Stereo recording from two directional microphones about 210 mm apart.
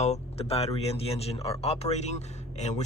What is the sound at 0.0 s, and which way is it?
Speech, 30° left (ahead or behind).